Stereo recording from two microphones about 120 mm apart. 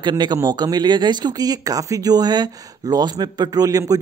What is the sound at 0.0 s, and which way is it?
Speech, 35° right (ahead or behind).